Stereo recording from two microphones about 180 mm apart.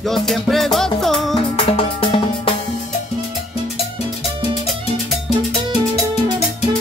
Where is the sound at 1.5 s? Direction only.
30° left (ahead or behind).